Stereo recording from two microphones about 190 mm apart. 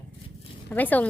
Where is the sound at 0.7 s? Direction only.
10° left (ahead or behind).